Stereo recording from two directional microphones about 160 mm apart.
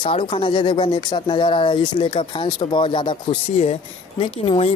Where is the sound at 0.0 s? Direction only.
30° left (ahead or behind).